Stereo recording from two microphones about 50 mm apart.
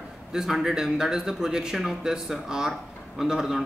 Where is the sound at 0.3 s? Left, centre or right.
Centre.